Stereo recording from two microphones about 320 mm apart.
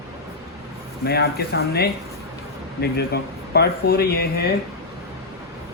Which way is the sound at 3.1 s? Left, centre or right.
Left.